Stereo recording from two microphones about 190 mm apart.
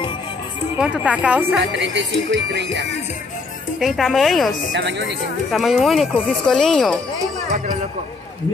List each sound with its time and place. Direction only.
0.7 s speech: 5° right (ahead or behind)
1.7 s music: 70° right (ahead or behind)
3.8 s speech: centre (ahead or behind)
4.7 s speech: 65° right (ahead or behind)
5.5 s speech: centre (ahead or behind)